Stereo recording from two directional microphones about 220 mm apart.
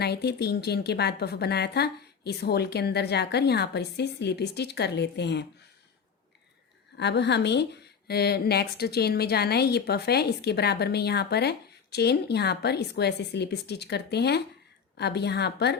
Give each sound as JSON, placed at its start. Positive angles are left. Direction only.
{"t": 0.0, "sound": "speech", "side_deg": 50}
{"t": 6.9, "sound": "speech", "side_deg": 50}